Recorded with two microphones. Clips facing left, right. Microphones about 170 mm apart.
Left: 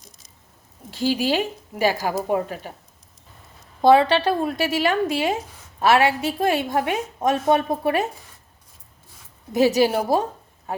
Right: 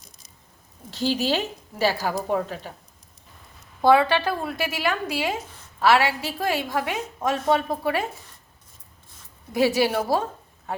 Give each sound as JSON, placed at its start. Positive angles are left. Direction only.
{"t": 0.9, "sound": "a woman's voice", "side_deg": 10}
{"t": 3.8, "sound": "a woman's voice", "side_deg": 25}
{"t": 9.5, "sound": "a woman's voice", "side_deg": 20}